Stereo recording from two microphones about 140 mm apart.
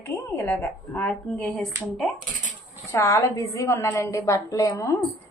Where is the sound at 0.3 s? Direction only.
15° left (ahead or behind).